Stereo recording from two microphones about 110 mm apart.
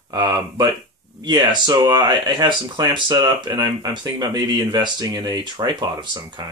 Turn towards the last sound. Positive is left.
turn(degrees=-45)  # may be behind; listen again after turning